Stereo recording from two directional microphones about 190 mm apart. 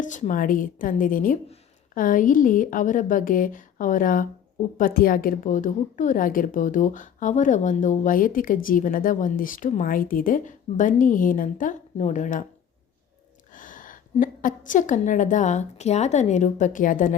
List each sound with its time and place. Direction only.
0.0 s a woman's voice: 40° left (ahead or behind)
13.5 s a woman's voice: 45° left (ahead or behind)